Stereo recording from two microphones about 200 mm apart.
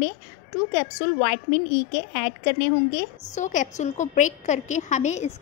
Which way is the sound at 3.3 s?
40° left (ahead or behind).